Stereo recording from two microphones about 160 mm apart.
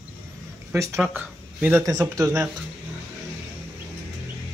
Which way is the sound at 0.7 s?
20° right (ahead or behind).